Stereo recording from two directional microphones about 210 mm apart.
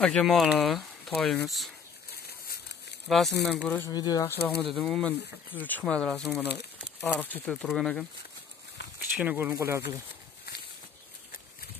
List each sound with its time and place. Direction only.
0.0 s speech: 5° left (ahead or behind)
2.2 s a sound: 50° left (ahead or behind)
3.1 s speech: centre (ahead or behind)
3.9 s speech: 20° left (ahead or behind)
4.6 s speech: centre (ahead or behind)
9.1 s speech: 5° right (ahead or behind)